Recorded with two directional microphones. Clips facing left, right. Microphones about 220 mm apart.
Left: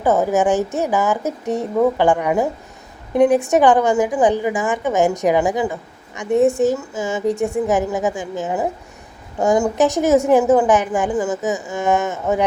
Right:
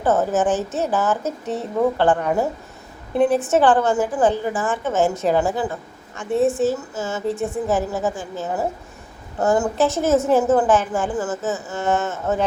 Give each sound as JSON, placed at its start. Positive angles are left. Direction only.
{"t": 0.0, "sound": "a woman's voice", "side_deg": 10}